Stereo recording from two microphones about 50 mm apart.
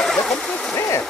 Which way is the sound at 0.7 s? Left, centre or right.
Left.